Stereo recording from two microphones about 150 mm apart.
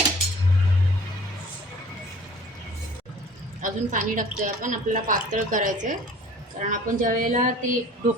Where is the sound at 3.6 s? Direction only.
60° right (ahead or behind).